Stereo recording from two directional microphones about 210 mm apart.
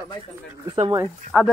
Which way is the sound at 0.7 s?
20° right (ahead or behind).